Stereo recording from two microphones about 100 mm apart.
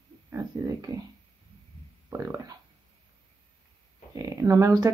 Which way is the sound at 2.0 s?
35° right (ahead or behind).